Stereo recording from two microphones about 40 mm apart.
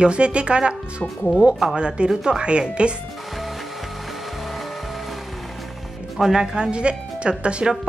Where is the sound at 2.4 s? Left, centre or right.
Right.